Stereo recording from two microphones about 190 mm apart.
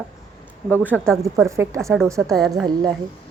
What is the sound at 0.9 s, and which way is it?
Speech, 5° left (ahead or behind).